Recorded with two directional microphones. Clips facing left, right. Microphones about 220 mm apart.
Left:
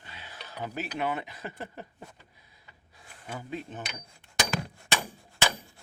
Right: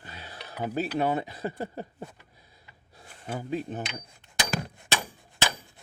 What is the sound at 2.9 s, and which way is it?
Speech, 35° right (ahead or behind).